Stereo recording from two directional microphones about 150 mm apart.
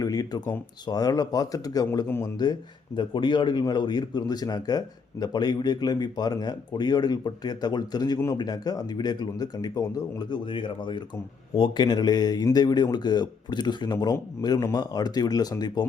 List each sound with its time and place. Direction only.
0.0 s speech: 25° left (ahead or behind)
2.4 s speech: 30° left (ahead or behind)